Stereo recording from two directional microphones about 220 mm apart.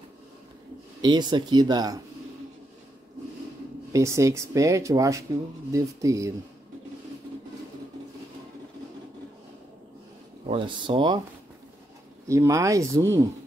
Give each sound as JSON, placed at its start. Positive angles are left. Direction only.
{"t": 1.0, "sound": "speech", "side_deg": -20}
{"t": 3.9, "sound": "speech", "side_deg": -15}
{"t": 10.5, "sound": "speech", "side_deg": -25}
{"t": 12.3, "sound": "speech", "side_deg": -15}